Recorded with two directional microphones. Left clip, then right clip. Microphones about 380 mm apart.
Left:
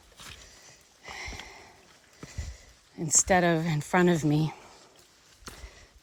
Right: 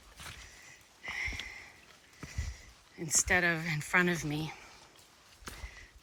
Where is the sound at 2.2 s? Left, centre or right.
Centre.